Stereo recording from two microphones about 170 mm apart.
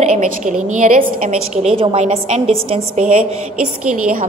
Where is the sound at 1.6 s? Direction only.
35° right (ahead or behind).